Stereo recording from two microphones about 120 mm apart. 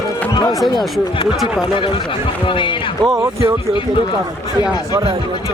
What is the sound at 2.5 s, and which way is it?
Speech, 45° left (ahead or behind).